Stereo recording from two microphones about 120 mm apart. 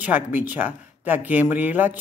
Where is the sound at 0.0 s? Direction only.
15° right (ahead or behind).